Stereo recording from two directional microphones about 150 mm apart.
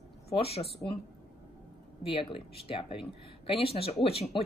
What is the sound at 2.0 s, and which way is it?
Speech, 40° left (ahead or behind).